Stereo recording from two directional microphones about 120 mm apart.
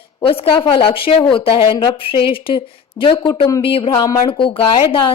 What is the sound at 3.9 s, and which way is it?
Speech, 30° left (ahead or behind).